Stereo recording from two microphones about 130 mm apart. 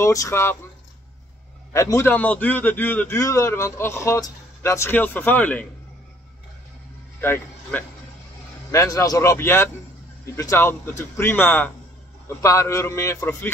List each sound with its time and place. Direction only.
0.0 s a man's voice: 25° left (ahead or behind)
1.7 s a man's voice: 20° left (ahead or behind)
7.2 s a man's voice: 15° left (ahead or behind)